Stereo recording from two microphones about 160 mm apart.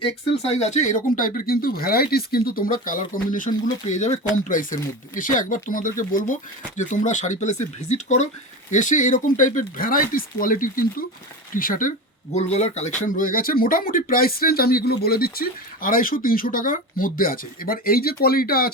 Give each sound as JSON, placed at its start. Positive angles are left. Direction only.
{"t": 0.0, "sound": "speech", "side_deg": 40}